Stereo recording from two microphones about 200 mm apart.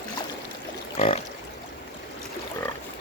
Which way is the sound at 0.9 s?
30° left (ahead or behind).